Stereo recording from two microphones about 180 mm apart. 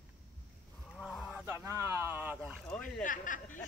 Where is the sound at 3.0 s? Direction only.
45° left (ahead or behind).